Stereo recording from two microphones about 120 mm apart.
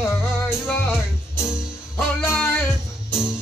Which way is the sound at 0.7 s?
15° left (ahead or behind).